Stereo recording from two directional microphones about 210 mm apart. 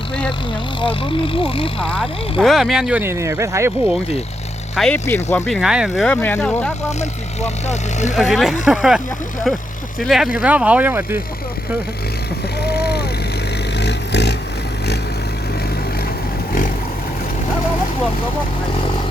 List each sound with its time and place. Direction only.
0.8 s speech: 25° left (ahead or behind)
1.8 s speech: 5° left (ahead or behind); by 3.9 s 15° right (ahead or behind)
4.7 s speech: centre (ahead or behind)
5.0 s speech: 10° left (ahead or behind)
5.5 s speech: centre (ahead or behind)
7.0 s speech: 35° left (ahead or behind)
8.1 s speech: centre (ahead or behind)
10.0 s speech: centre (ahead or behind)
12.6 s vehicle: 50° left (ahead or behind)